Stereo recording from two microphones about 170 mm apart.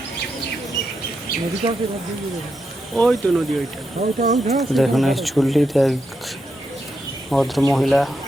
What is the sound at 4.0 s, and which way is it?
Speech, 40° right (ahead or behind).